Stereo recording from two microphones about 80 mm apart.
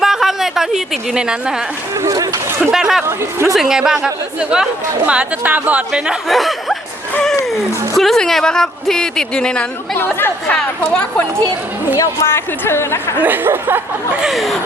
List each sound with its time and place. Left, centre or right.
0.0 s a sound: centre
2.0 s speech: right
2.7 s speech: centre
3.1 s speech: right
3.5 s speech: centre
5.9 s speech: centre
7.9 s speech: centre
11.9 s speech: left
13.1 s speech: right
14.1 s speech: centre
14.3 s speech: centre